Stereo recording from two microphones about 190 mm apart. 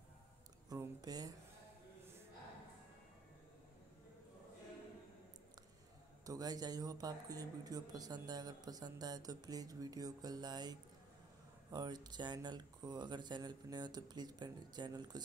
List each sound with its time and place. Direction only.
0.7 s speech: 20° right (ahead or behind)
6.2 s speech: 20° right (ahead or behind)